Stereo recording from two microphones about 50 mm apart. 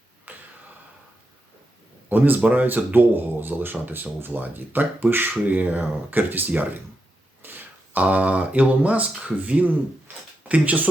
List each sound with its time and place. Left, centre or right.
0.3 s a sound: right
2.0 s speech: right
7.4 s speech: right